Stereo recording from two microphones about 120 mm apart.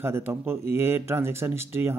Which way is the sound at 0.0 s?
20° right (ahead or behind).